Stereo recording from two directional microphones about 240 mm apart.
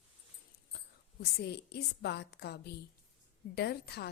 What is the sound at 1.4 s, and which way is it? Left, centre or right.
A woman's voice, left.